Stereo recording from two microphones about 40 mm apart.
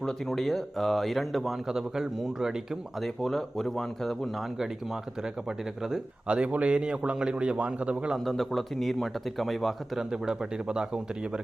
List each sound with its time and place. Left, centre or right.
0.0 s speech: centre
3.0 s speech: centre
4.5 s speech: centre
6.2 s speech: right
8.1 s speech: centre
10.1 s speech: centre